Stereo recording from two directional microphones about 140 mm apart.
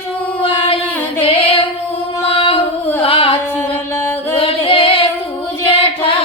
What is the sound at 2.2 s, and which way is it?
Singing, 40° left (ahead or behind).